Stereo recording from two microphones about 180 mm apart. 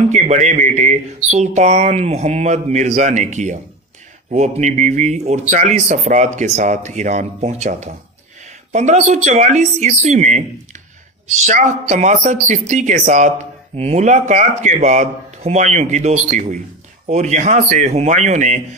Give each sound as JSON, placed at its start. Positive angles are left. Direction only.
{"t": 0.1, "sound": "speech", "side_deg": -40}